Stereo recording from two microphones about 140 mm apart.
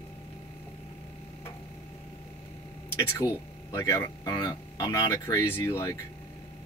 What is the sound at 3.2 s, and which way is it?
Speech, 25° left (ahead or behind).